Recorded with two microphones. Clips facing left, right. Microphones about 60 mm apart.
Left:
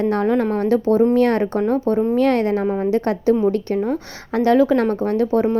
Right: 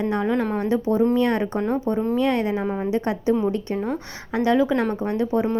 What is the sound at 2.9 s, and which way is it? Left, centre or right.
A woman's voice, centre.